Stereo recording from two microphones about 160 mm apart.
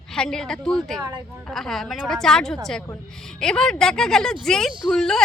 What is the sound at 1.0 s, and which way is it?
Speech, 25° right (ahead or behind).